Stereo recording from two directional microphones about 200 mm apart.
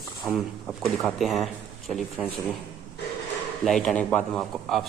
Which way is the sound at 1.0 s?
Centre (ahead or behind).